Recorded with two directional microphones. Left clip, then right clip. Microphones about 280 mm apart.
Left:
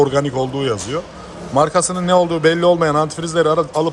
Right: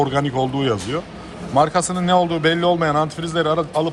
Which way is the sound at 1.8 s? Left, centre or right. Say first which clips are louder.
Left 2 dB; centre.